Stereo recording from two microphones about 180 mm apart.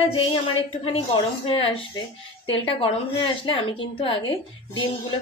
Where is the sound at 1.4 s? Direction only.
30° left (ahead or behind).